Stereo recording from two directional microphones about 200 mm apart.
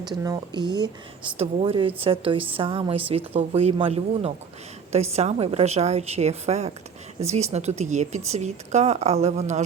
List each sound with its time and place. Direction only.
0.1 s a woman's voice: 20° right (ahead or behind)